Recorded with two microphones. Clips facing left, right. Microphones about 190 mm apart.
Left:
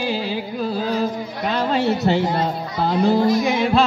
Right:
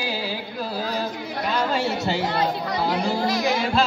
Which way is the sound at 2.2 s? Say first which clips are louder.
Left 2 dB; 75° right (ahead or behind).